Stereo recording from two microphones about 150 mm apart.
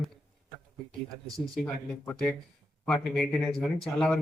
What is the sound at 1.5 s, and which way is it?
Speech, 5° left (ahead or behind).